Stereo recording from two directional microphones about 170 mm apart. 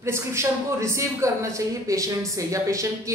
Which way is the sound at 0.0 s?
15° right (ahead or behind).